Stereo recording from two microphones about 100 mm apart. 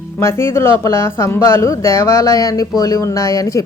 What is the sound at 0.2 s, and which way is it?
A woman's voice, 25° left (ahead or behind).